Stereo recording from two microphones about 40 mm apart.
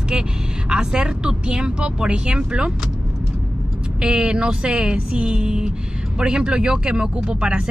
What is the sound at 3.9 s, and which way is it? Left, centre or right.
Speech, right.